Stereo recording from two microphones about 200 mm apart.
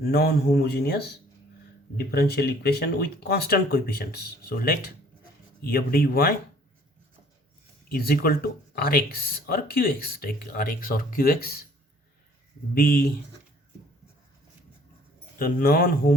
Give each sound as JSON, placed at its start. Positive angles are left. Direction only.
{"t": 0.0, "sound": "speech", "side_deg": 50}
{"t": 7.9, "sound": "speech", "side_deg": 50}
{"t": 12.7, "sound": "speech", "side_deg": 45}
{"t": 15.4, "sound": "speech", "side_deg": 45}